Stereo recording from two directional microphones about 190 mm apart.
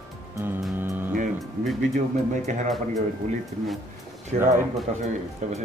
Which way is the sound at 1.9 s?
40° right (ahead or behind).